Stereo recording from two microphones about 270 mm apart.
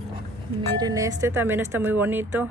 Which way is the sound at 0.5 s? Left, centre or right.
Centre.